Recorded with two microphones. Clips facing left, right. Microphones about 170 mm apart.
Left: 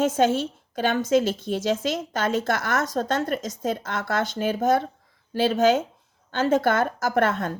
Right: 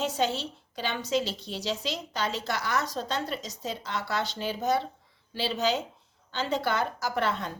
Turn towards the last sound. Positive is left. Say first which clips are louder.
# left 7 dB
turn(degrees=50)  # may be behind; listen again after turning